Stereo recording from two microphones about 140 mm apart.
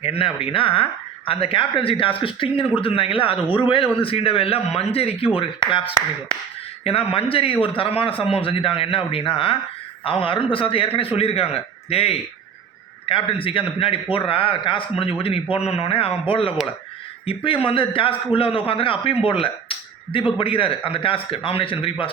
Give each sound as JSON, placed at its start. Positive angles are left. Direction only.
{"t": 0.0, "sound": "a man's voice", "side_deg": 40}
{"t": 6.8, "sound": "a man's voice", "side_deg": 45}